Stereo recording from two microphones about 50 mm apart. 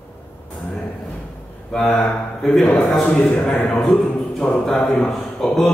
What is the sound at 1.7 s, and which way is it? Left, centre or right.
Speech, centre.